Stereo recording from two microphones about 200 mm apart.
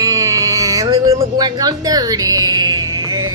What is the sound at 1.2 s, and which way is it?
Music, 20° right (ahead or behind).